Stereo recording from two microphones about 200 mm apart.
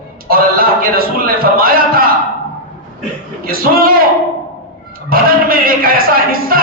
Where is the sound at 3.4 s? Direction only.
45° right (ahead or behind).